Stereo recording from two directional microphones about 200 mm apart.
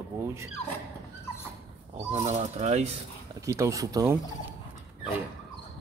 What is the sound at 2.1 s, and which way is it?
Speech, 35° right (ahead or behind).